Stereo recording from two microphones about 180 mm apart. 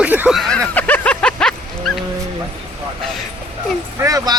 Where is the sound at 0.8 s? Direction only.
10° left (ahead or behind).